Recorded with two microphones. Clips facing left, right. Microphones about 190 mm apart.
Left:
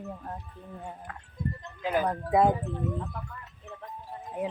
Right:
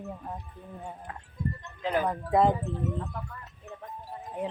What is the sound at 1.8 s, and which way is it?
Speech, 10° left (ahead or behind).